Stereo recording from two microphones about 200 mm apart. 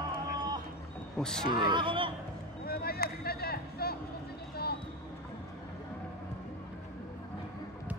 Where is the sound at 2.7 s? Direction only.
50° left (ahead or behind).